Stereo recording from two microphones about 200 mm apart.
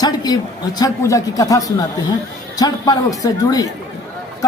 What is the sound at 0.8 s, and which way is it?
A woman's voice, 15° left (ahead or behind).